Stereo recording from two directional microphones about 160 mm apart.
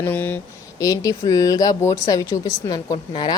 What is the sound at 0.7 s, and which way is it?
A woman's voice, 20° left (ahead or behind).